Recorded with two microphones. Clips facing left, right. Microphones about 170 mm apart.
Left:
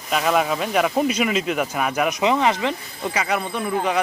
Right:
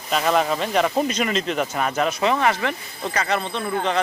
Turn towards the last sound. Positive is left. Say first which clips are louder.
# left 1 dB
turn(degrees=10)  # may be behind; listen again after turning